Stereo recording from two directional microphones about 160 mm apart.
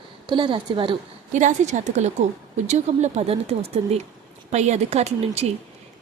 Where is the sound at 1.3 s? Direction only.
50° right (ahead or behind).